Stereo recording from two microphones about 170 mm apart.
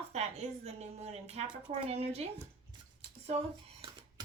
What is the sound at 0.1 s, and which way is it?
A woman's voice, 40° right (ahead or behind).